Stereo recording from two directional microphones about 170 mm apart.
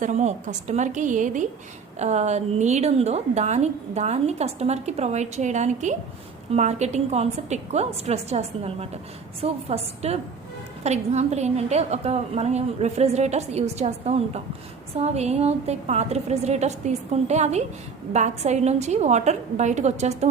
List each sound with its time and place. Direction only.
0.0 s a woman's voice: 45° right (ahead or behind)